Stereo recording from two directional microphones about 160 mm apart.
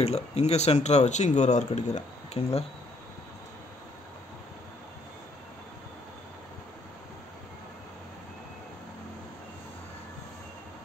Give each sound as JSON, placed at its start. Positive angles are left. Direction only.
{"t": 0.0, "sound": "speech", "side_deg": 40}